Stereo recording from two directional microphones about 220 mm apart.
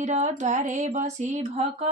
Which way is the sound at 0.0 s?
30° right (ahead or behind).